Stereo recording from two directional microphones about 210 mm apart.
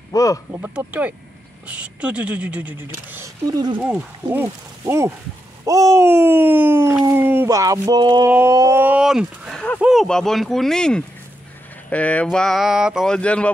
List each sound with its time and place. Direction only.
0.1 s speech: 15° left (ahead or behind)
0.5 s speech: 10° right (ahead or behind)